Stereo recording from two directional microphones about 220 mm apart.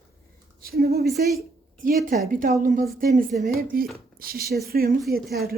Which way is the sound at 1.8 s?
40° right (ahead or behind).